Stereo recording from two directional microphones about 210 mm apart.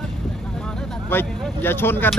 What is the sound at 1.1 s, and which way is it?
Speech, 10° left (ahead or behind).